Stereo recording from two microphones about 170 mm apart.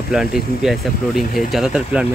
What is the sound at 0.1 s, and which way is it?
Speech, 5° right (ahead or behind).